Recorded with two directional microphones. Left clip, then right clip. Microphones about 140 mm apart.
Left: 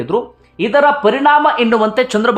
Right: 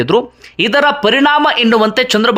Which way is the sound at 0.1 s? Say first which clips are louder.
Right 1 dB; 25° right (ahead or behind).